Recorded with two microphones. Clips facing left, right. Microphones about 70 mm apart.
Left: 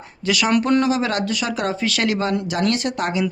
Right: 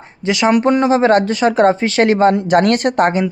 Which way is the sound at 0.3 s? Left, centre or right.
Right.